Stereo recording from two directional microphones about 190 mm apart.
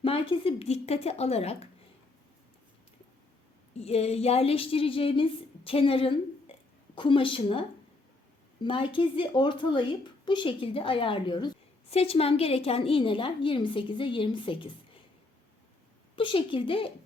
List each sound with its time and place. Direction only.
0.0 s speech: 30° left (ahead or behind)
3.8 s speech: 35° left (ahead or behind)
8.6 s speech: 25° left (ahead or behind)
16.1 s speech: 25° left (ahead or behind)